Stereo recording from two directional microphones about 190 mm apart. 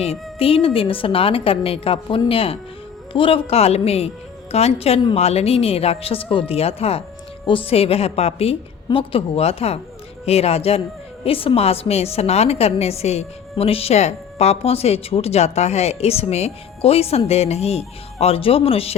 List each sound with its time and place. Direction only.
0.0 s a woman's voice: 30° left (ahead or behind)